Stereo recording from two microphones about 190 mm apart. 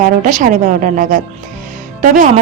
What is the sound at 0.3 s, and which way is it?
A woman's voice, 40° right (ahead or behind).